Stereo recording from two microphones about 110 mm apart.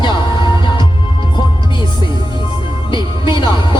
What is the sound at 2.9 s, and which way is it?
Music, 45° left (ahead or behind).